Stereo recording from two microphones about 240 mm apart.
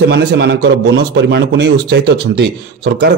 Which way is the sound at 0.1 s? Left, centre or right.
Right.